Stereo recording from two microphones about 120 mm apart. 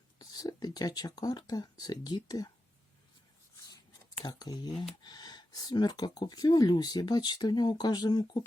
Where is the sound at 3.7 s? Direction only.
35° left (ahead or behind).